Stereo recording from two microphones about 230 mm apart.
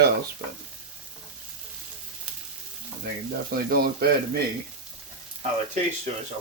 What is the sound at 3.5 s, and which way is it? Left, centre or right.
Speech, right.